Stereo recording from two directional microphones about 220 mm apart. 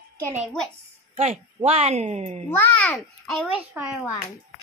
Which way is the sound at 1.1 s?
25° right (ahead or behind).